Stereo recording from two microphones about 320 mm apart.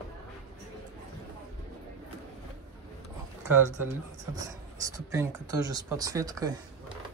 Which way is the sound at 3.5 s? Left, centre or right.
Centre.